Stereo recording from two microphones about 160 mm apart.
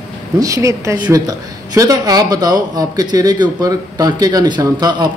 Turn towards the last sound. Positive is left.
turn(degrees=-25)  # may be behind; listen again after turning